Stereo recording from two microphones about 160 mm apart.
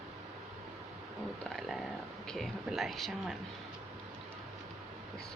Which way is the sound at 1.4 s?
Centre (ahead or behind).